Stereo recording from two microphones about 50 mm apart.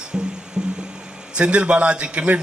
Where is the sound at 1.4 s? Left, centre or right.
Right.